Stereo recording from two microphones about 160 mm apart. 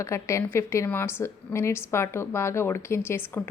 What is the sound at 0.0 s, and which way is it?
A woman's voice, 20° left (ahead or behind).